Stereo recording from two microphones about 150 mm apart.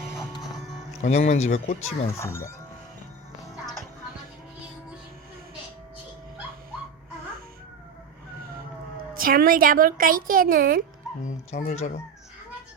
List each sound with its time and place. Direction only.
1.0 s speech: 50° left (ahead or behind)
2.1 s speech: 20° left (ahead or behind)
9.1 s a woman's voice: 70° right (ahead or behind)
11.5 s speech: 45° left (ahead or behind)